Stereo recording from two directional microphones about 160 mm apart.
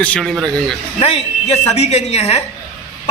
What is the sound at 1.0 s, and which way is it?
A woman's voice, 40° left (ahead or behind).